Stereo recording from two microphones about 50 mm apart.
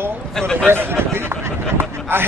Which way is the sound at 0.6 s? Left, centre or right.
Right.